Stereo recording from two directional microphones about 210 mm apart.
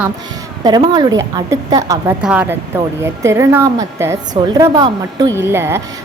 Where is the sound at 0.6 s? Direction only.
20° right (ahead or behind).